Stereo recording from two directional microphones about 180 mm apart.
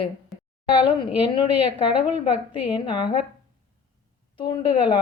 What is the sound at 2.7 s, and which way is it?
Speech, 25° left (ahead or behind).